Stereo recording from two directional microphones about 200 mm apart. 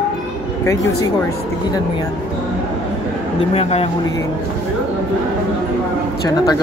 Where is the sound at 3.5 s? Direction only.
30° left (ahead or behind).